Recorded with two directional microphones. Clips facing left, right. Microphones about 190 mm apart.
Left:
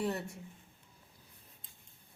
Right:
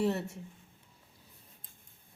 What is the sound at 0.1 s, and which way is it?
Speech, 25° right (ahead or behind).